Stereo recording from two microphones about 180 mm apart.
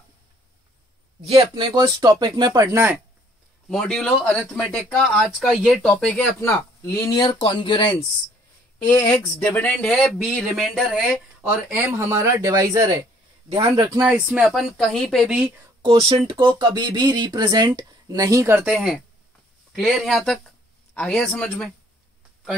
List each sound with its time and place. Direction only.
1.2 s speech: 30° right (ahead or behind); by 3.0 s 15° right (ahead or behind)
3.6 s speech: 5° left (ahead or behind)
6.4 s speech: 15° left (ahead or behind)
8.8 s speech: 10° left (ahead or behind)
11.7 s speech: 15° right (ahead or behind)
14.0 s speech: 10° right (ahead or behind)
15.8 s speech: 30° right (ahead or behind)
18.6 s speech: 5° right (ahead or behind)